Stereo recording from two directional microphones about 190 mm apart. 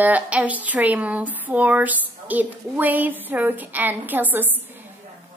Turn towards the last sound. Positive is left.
turn(degrees=-10)  # may be behind; listen again after turning